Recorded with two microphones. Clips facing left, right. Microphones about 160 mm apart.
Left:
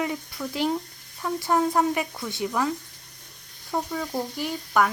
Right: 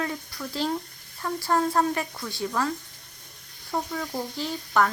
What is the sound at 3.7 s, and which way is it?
Speech, 5° left (ahead or behind).